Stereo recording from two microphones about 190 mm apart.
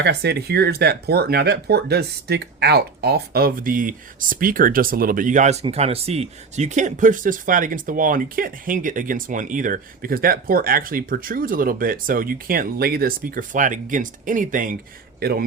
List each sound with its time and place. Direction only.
0.0 s a man's voice: 60° right (ahead or behind)